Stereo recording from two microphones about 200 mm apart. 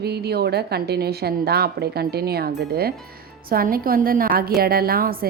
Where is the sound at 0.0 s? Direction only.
55° right (ahead or behind).